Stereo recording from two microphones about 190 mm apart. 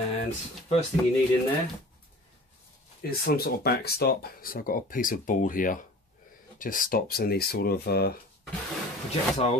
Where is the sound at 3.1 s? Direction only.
55° left (ahead or behind).